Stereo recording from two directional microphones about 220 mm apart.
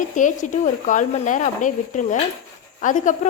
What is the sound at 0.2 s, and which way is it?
Speech, 35° left (ahead or behind).